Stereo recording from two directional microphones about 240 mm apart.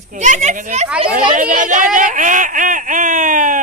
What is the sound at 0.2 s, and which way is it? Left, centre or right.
Speech, right.